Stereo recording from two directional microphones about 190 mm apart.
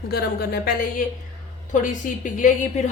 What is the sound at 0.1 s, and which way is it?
A woman's voice, 55° left (ahead or behind).